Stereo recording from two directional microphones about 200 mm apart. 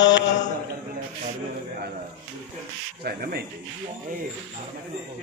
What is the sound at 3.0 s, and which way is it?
Speech, 50° right (ahead or behind).